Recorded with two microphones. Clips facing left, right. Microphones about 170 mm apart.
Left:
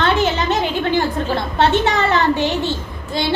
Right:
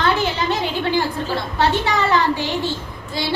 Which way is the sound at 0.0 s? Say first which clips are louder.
Left 3 dB; 20° left (ahead or behind).